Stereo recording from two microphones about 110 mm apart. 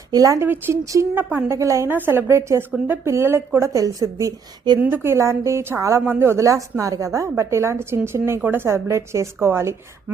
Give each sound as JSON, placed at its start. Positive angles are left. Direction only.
{"t": 0.1, "sound": "speech", "side_deg": -30}
{"t": 0.4, "sound": "a woman's voice", "side_deg": -20}
{"t": 1.5, "sound": "a woman's voice", "side_deg": -25}